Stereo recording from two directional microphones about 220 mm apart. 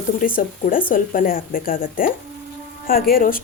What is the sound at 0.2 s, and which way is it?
Speech, 40° left (ahead or behind).